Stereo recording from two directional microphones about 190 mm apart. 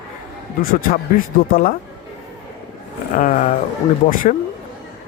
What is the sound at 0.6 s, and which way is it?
Speech, 50° left (ahead or behind).